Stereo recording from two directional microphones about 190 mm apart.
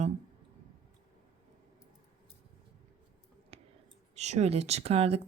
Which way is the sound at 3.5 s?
30° right (ahead or behind).